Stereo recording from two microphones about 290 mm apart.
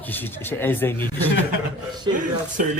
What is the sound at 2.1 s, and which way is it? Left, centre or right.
Speech, centre.